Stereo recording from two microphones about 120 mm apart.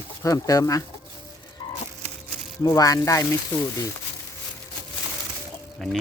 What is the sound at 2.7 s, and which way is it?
Speech, 30° left (ahead or behind).